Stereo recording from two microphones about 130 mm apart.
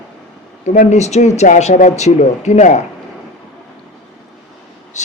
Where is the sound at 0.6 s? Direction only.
75° left (ahead or behind).